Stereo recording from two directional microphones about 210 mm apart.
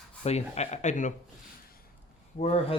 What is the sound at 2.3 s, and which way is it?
Speech, 30° left (ahead or behind).